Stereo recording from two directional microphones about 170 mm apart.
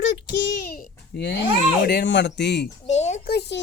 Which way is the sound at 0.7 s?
75° left (ahead or behind).